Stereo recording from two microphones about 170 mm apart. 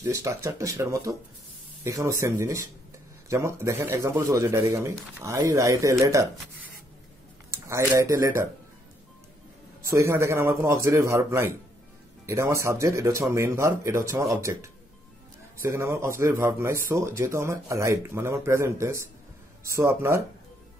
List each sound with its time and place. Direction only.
0.0 s speech: 15° right (ahead or behind)
9.8 s speech: 15° right (ahead or behind)